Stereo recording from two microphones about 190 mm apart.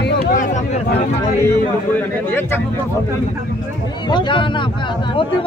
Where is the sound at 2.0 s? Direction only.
10° left (ahead or behind).